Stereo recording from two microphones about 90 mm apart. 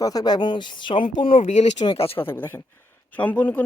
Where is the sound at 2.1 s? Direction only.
25° left (ahead or behind).